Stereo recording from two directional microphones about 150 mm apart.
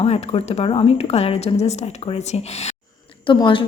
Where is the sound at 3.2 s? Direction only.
35° left (ahead or behind).